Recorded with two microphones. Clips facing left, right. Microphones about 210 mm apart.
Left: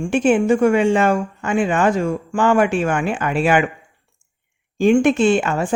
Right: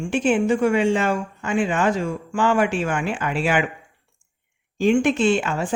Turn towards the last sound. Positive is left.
turn(degrees=50)  # may be behind; listen again after turning